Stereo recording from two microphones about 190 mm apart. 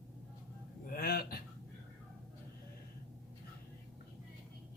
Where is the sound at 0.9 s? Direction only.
50° left (ahead or behind).